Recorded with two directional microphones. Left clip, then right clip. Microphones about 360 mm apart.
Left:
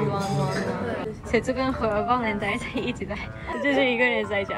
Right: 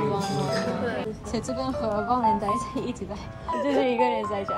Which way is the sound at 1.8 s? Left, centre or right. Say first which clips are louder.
Right 1 dB; centre.